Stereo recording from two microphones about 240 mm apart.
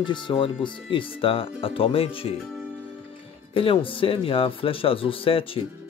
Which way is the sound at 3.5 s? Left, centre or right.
Left.